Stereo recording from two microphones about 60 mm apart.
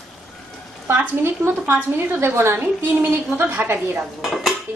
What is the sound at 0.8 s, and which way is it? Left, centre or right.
A woman's voice, right.